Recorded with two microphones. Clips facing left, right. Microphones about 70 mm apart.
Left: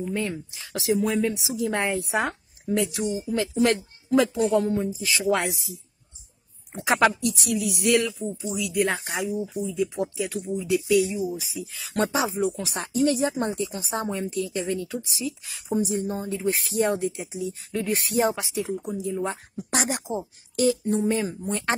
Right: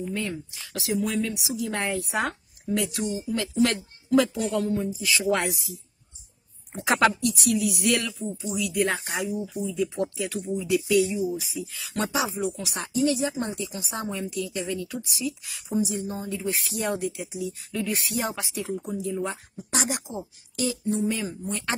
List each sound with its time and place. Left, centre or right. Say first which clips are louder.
0.1 s a woman's voice: left 2 dB; left
6.7 s speech: left 1 dB; centre
7.2 s a woman's voice: right 2 dB; left
11.9 s speech: left 3 dB; left
18.3 s a woman's voice: left 4 dB; centre
19.7 s a sound: left 2 dB; left
21.2 s speech: left 4 dB; left